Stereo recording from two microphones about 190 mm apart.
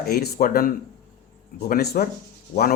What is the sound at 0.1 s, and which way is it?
Speech, 55° left (ahead or behind).